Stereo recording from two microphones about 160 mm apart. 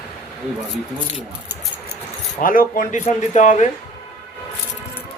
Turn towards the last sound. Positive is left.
turn(degrees=50)  # may be behind; listen again after turning